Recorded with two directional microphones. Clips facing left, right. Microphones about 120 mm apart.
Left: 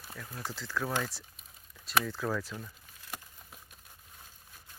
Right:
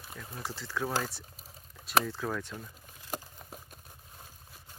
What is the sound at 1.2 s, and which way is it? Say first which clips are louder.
Typing: right 4 dB; 35° right (ahead or behind).